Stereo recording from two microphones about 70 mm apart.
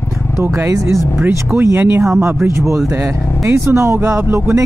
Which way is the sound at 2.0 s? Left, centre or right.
Right.